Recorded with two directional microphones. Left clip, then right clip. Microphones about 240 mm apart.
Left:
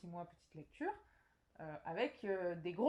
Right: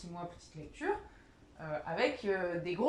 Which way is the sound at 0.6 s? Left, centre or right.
Left.